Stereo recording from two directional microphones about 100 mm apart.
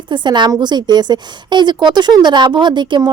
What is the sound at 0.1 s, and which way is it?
A woman's voice, 50° right (ahead or behind).